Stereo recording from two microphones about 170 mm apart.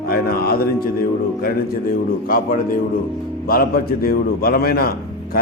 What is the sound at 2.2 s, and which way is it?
A man's voice, 55° left (ahead or behind).